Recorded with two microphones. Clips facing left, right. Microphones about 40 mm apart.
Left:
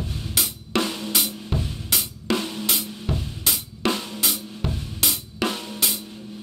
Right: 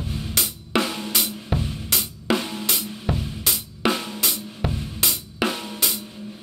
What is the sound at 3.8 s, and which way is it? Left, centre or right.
Drum kit, centre.